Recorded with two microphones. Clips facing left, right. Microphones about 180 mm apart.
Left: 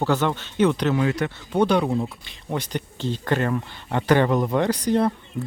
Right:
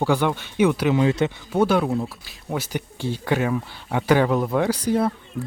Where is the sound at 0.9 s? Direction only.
25° right (ahead or behind).